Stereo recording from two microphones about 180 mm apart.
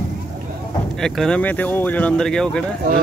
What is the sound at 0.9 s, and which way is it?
Speech, 5° left (ahead or behind).